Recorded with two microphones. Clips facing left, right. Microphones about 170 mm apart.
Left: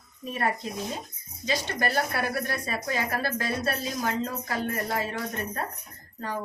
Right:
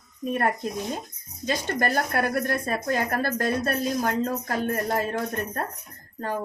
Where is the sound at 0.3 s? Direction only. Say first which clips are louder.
Right 4 dB; 50° right (ahead or behind).